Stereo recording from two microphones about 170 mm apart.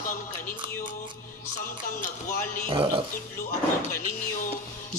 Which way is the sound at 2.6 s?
30° right (ahead or behind).